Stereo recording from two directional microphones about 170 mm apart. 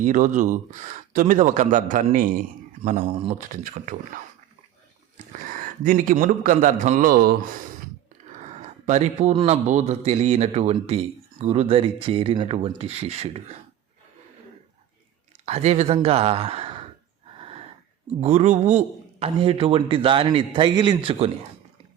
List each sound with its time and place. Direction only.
0.0 s speech: 45° right (ahead or behind)
3.1 s a man's voice: 35° right (ahead or behind)
3.5 s speech: 55° right (ahead or behind)
5.1 s a man's voice: 50° right (ahead or behind)
8.9 s a man's voice: 40° right (ahead or behind)
15.4 s a man's voice: 40° right (ahead or behind)
18.2 s a man's voice: 40° right (ahead or behind)